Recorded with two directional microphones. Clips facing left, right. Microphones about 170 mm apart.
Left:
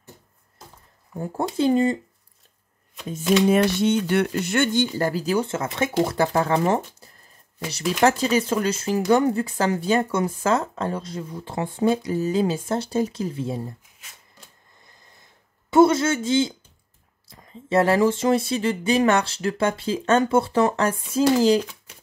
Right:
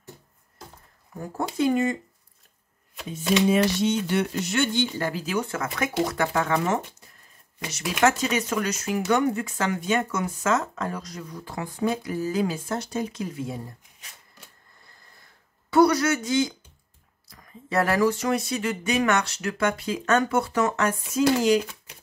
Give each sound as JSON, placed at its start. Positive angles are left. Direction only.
{"t": 1.2, "sound": "speech", "side_deg": 30}
{"t": 3.4, "sound": "speech", "side_deg": 55}
{"t": 15.7, "sound": "speech", "side_deg": 25}
{"t": 21.5, "sound": "a child's voice", "side_deg": -10}